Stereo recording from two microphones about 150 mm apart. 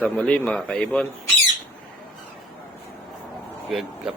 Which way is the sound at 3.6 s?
Centre (ahead or behind).